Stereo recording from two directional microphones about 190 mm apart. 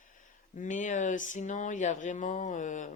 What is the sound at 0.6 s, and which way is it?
Speech, 40° left (ahead or behind).